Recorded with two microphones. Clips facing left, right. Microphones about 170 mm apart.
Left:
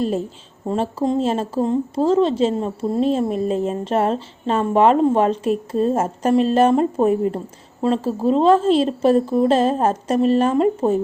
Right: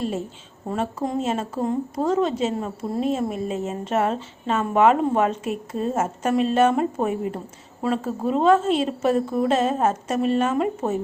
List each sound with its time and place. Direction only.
0.7 s a woman's voice: 25° left (ahead or behind)